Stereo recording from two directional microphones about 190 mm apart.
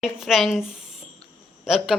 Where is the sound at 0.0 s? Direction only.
Centre (ahead or behind).